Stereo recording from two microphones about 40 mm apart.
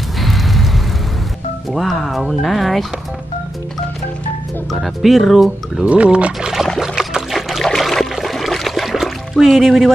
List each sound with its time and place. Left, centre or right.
1.7 s speech: centre
4.7 s speech: centre
5.9 s speech: right
6.8 s a sound: centre
7.6 s trickle: centre
8.9 s music: centre